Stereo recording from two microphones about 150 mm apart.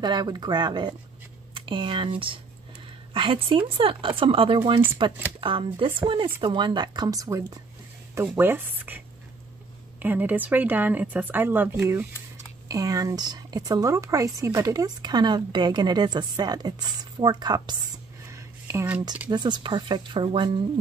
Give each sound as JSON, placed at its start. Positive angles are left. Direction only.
{"t": 0.0, "sound": "a woman's voice", "side_deg": -30}
{"t": 18.3, "sound": "a sound", "side_deg": -20}
{"t": 19.3, "sound": "speech", "side_deg": -30}